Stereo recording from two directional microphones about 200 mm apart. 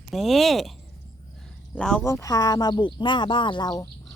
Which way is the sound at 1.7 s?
5° left (ahead or behind).